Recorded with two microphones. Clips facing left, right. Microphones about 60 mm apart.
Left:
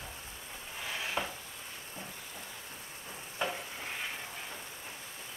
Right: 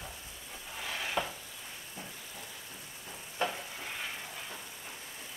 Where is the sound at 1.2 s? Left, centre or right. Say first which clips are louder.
Right 2 dB; centre.